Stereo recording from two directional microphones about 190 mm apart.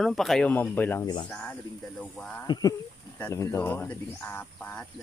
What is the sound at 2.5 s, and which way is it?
Speech, 20° left (ahead or behind).